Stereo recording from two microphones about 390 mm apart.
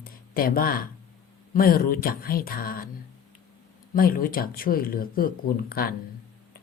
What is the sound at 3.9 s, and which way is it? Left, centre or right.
Speech, left.